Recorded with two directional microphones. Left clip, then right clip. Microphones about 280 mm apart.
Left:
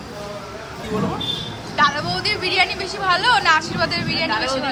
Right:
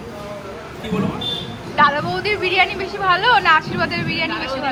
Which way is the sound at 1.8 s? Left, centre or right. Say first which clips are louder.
Right 3 dB; centre.